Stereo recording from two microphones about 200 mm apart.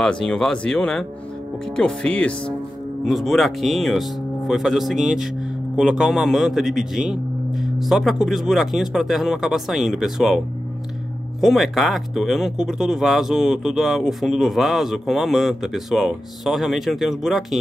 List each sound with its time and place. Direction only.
0.0 s speech: centre (ahead or behind)
11.4 s speech: centre (ahead or behind)